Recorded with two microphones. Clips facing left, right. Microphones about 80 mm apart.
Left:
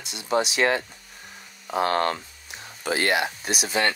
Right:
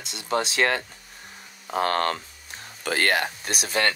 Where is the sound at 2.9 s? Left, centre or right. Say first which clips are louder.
Even; right.